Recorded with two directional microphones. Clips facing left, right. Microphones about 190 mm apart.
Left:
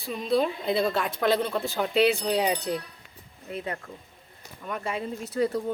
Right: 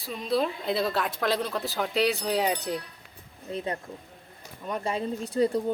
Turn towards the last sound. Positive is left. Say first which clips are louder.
# right 2 dB
turn(degrees=-30)  # may be behind; listen again after turning